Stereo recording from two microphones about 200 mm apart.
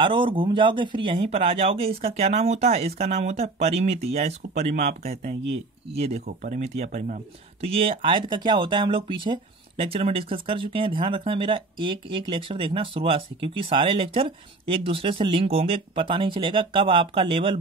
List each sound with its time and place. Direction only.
0.0 s speech: 25° right (ahead or behind)